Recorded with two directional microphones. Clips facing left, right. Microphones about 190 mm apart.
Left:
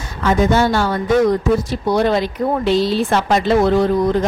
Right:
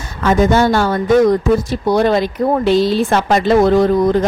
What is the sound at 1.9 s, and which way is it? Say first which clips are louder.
A woman's voice: right 2 dB; 50° right (ahead or behind).